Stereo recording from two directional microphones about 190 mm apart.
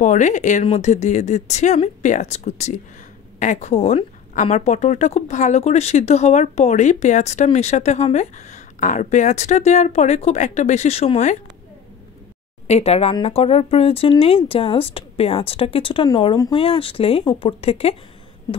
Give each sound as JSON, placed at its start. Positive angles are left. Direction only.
{"t": 0.0, "sound": "a woman's voice", "side_deg": 40}
{"t": 12.6, "sound": "a woman's voice", "side_deg": 35}